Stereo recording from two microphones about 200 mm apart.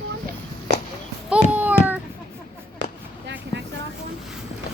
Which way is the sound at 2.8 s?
65° right (ahead or behind).